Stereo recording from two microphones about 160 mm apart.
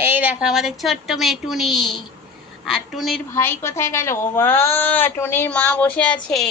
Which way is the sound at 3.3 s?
15° left (ahead or behind).